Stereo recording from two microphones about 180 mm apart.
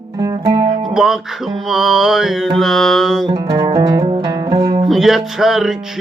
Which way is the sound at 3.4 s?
20° right (ahead or behind).